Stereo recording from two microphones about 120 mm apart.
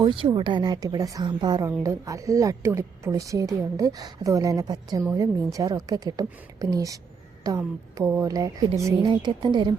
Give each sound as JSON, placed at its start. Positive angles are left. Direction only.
{"t": 0.0, "sound": "a woman's voice", "side_deg": -45}
{"t": 9.2, "sound": "speech", "side_deg": -40}